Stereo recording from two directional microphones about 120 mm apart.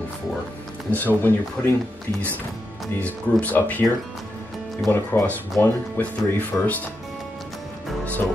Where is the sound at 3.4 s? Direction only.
15° left (ahead or behind).